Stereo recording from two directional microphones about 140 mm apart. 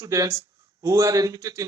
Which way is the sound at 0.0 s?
25° right (ahead or behind).